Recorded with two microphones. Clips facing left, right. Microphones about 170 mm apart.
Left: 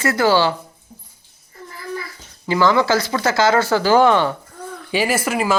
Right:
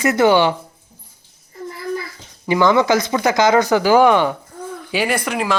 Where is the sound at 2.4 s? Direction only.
20° right (ahead or behind).